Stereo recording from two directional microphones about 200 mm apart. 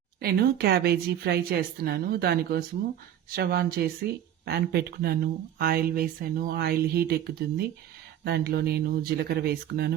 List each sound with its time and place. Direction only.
0.2 s speech: 50° right (ahead or behind)